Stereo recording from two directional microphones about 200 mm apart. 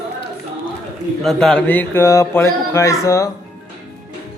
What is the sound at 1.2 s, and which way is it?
Speech, centre (ahead or behind).